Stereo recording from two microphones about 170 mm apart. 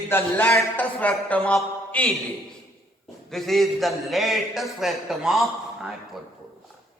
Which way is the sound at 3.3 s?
Centre (ahead or behind).